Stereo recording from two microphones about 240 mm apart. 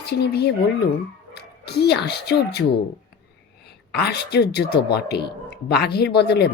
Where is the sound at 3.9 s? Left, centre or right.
Left.